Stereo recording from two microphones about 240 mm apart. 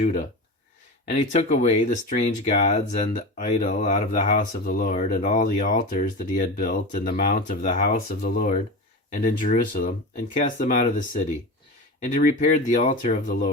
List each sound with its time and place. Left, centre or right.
0.0 s speech: left